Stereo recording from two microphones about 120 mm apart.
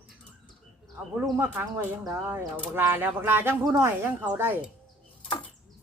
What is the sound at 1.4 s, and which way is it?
Speech, 15° right (ahead or behind).